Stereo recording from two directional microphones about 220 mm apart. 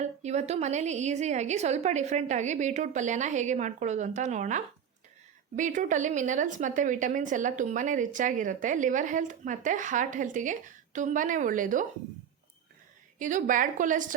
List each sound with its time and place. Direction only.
0.0 s a woman's voice: 30° right (ahead or behind)
13.1 s a woman's voice: 35° right (ahead or behind)